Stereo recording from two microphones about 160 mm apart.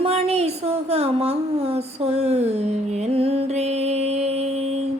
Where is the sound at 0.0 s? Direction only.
40° right (ahead or behind).